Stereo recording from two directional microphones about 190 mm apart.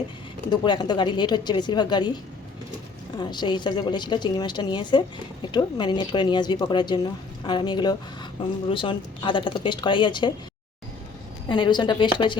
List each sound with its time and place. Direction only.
0.5 s speech: 20° left (ahead or behind)
3.2 s speech: 25° left (ahead or behind)
11.4 s speech: 25° left (ahead or behind)